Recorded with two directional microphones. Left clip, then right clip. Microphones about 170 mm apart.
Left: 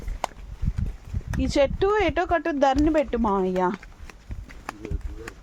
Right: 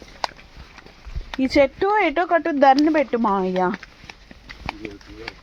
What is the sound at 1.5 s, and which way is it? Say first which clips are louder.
Speech: right 4 dB; 40° right (ahead or behind).